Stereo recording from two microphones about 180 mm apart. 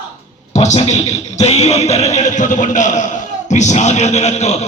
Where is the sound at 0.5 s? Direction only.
40° left (ahead or behind).